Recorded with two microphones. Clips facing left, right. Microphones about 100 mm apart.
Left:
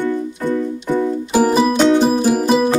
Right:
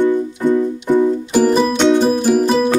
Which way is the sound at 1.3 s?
5° left (ahead or behind).